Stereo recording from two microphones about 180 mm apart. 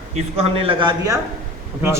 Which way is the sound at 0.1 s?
35° right (ahead or behind).